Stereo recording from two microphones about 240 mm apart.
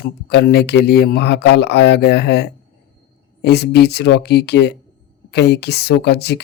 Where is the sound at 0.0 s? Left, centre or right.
Left.